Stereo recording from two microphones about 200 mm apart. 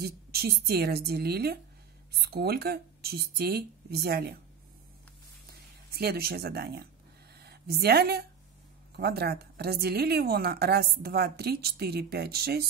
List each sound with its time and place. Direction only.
0.0 s a woman's voice: 50° right (ahead or behind)
5.5 s a woman's voice: 50° right (ahead or behind)